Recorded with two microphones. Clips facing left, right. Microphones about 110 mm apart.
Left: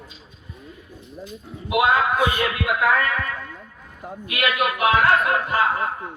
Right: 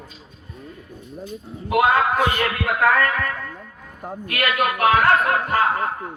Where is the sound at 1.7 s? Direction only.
45° right (ahead or behind).